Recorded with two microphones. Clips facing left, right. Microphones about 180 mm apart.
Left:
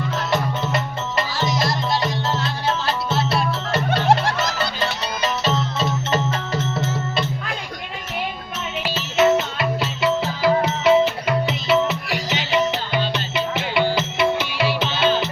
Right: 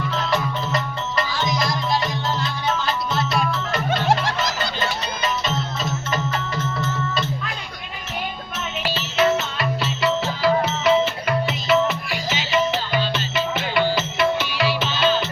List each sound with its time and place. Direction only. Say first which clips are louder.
0.3 s music: left 3 dB; 25° left (ahead or behind)
2.6 s music: left 1 dB; 30° left (ahead or behind)
9.1 s music: left 3 dB; 20° left (ahead or behind)